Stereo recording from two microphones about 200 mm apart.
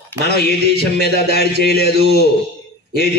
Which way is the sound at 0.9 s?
50° left (ahead or behind).